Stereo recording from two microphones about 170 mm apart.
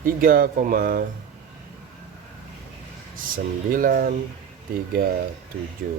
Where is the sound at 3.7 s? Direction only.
55° right (ahead or behind).